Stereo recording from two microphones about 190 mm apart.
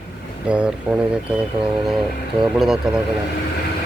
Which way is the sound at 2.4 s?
Centre (ahead or behind).